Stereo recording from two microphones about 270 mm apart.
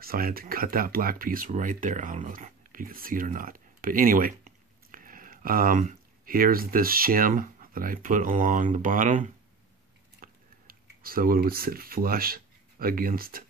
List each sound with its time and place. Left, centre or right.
0.0 s speech: right